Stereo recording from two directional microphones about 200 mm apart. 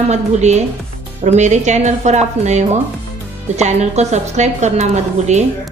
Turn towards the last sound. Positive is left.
turn(degrees=-35)  # may be behind; listen again after turning